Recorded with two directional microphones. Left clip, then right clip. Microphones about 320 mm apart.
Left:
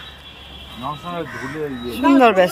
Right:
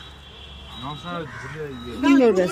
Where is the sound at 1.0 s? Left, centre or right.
Left.